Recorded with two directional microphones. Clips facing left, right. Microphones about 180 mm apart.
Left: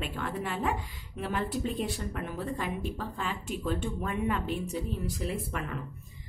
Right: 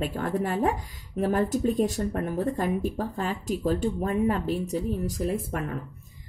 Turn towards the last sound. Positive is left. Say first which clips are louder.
# right 5 dB
turn(degrees=-45)  # may be behind; listen again after turning